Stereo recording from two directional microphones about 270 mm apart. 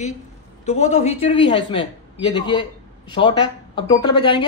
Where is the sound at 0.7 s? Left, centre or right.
Left.